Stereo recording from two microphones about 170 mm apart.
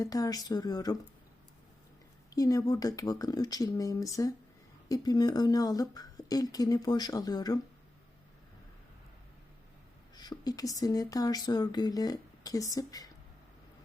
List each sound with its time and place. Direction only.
0.0 s speech: 20° left (ahead or behind)
2.3 s speech: 20° left (ahead or behind)
10.2 s speech: 25° left (ahead or behind)